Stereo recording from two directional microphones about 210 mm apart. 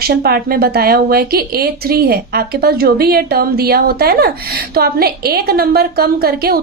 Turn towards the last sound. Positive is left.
turn(degrees=-45)  # may be behind; listen again after turning